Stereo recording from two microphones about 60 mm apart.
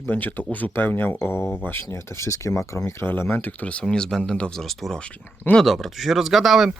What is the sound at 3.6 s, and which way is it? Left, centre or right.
Speech, left.